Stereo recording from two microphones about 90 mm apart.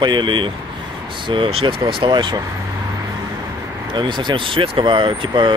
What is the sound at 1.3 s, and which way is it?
Speech, 80° right.